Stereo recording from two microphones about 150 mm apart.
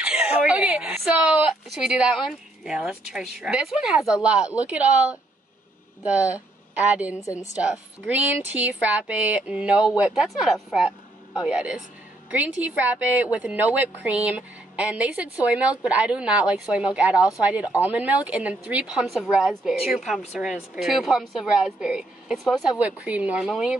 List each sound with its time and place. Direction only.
0.0 s a sound: 10° right (ahead or behind)
2.2 s a woman's voice: 5° right (ahead or behind)
7.2 s a woman's voice: 20° left (ahead or behind)
7.5 s a woman's voice: 10° right (ahead or behind)